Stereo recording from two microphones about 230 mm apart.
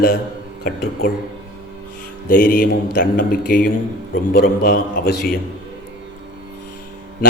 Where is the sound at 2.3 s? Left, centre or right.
Left.